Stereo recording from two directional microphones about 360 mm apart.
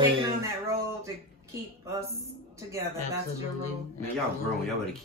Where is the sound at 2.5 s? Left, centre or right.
Centre.